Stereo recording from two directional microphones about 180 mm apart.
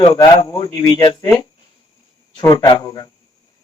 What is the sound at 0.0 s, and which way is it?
A man's voice, 25° left (ahead or behind).